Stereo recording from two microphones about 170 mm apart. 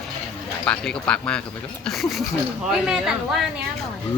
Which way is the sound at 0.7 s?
5° left (ahead or behind).